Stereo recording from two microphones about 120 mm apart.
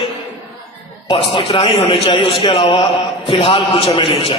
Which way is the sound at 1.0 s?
55° left (ahead or behind).